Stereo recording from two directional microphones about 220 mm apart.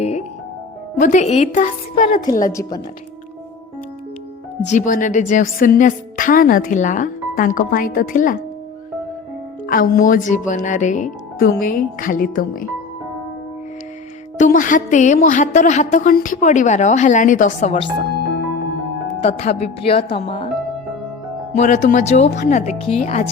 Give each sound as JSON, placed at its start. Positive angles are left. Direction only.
{"t": 0.0, "sound": "music", "side_deg": 30}
{"t": 0.9, "sound": "a woman's voice", "side_deg": 35}
{"t": 2.5, "sound": "speech", "side_deg": 15}
{"t": 4.6, "sound": "a woman's voice", "side_deg": 35}
{"t": 9.6, "sound": "a woman's voice", "side_deg": 40}
{"t": 14.3, "sound": "a woman's voice", "side_deg": 35}
{"t": 19.2, "sound": "speech", "side_deg": 30}
{"t": 21.5, "sound": "a woman's voice", "side_deg": 30}